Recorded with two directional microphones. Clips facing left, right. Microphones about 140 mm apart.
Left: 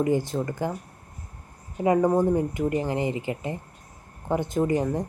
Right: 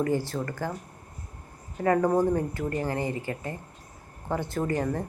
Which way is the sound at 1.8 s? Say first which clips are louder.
Left 2 dB; 15° left (ahead or behind).